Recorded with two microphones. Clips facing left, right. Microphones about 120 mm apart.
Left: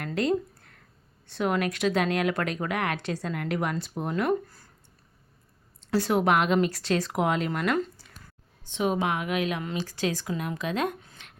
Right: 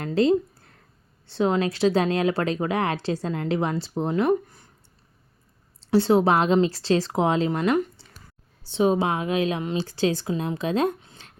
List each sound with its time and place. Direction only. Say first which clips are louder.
0.0 s a woman's voice: right 6 dB; 30° right (ahead or behind)
5.8 s a woman's voice: right 5 dB; 30° right (ahead or behind)
8.6 s speech: right 5 dB; 30° right (ahead or behind)